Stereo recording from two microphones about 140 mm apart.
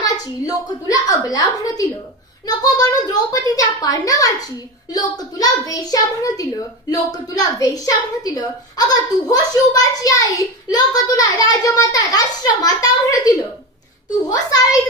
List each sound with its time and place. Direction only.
0.0 s a woman's voice: 25° left (ahead or behind)